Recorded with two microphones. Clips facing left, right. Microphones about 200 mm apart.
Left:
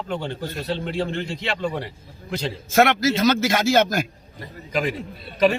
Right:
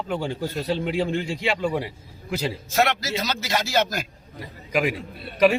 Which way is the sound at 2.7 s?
50° left (ahead or behind).